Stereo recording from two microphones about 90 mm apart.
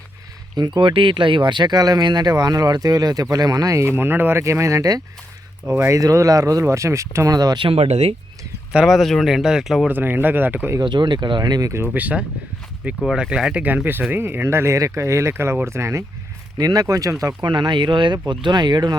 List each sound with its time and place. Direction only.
0.5 s speech: 55° right (ahead or behind)
5.6 s speech: 20° right (ahead or behind)
5.9 s speech: 40° right (ahead or behind)
7.3 s speech: 45° right (ahead or behind)
7.6 s speech: 90° right
8.7 s speech: 5° right (ahead or behind)
9.9 s speech: 20° right (ahead or behind)
10.8 s speech: 60° right (ahead or behind)
11.9 s speech: 15° right (ahead or behind); by 16.0 s 30° right (ahead or behind)
16.6 s speech: 45° right (ahead or behind)
17.4 s speech: 55° right (ahead or behind)